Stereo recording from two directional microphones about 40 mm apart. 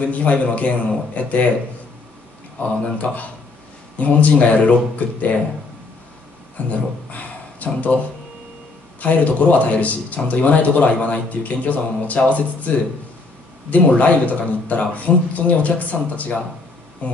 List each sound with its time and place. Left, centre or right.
0.0 s speech: left
2.6 s speech: left
6.7 s a sound: left
9.0 s speech: left
13.7 s speech: left